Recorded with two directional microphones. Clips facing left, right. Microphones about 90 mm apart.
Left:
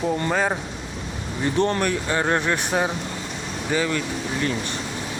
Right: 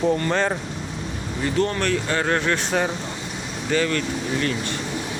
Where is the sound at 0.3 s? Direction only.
10° left (ahead or behind).